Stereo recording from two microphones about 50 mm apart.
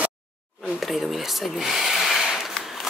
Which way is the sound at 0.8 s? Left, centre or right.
Centre.